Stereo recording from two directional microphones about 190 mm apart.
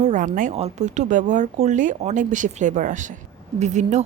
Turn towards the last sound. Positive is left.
turn(degrees=-40)  # may be behind; listen again after turning